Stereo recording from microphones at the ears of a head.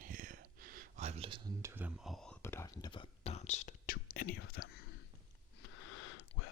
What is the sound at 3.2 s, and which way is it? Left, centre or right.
Whispering, left.